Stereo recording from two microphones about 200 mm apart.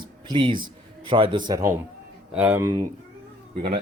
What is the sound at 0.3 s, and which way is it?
A man's voice, 25° right (ahead or behind).